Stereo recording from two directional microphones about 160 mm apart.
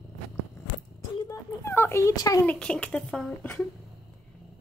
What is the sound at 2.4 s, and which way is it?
Speech, 5° left (ahead or behind).